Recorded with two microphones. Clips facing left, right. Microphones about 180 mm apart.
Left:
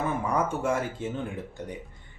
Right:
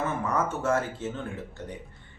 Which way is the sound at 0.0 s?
15° left (ahead or behind).